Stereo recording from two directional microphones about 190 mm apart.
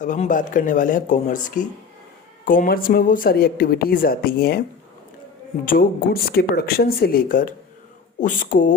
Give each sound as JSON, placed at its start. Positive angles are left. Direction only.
{"t": 0.0, "sound": "speech", "side_deg": 40}
{"t": 5.6, "sound": "speech", "side_deg": 50}